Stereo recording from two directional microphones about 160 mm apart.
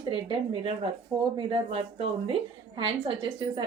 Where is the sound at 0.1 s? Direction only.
35° right (ahead or behind).